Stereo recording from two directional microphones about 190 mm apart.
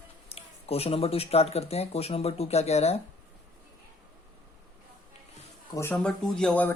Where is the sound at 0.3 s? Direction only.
30° left (ahead or behind).